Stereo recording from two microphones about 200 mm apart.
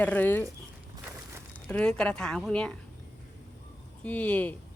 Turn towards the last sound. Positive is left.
turn(degrees=5)  # may be behind; listen again after turning